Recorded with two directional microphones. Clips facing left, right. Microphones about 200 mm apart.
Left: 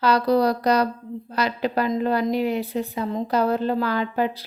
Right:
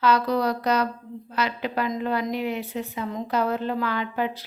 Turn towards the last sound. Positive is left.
turn(degrees=40)  # may be behind; listen again after turning